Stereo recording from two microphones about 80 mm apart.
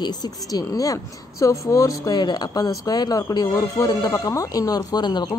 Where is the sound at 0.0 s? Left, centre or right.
Left.